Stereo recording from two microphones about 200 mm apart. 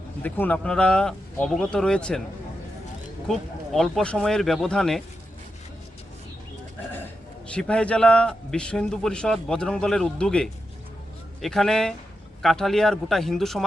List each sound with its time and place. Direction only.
0.2 s a man's voice: 10° left (ahead or behind)
3.2 s a man's voice: centre (ahead or behind)
7.5 s a man's voice: 5° left (ahead or behind)